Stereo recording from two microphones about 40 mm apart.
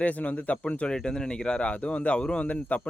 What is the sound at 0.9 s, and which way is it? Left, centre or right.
Speech, left.